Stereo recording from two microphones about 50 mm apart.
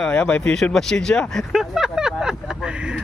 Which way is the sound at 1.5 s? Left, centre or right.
Centre.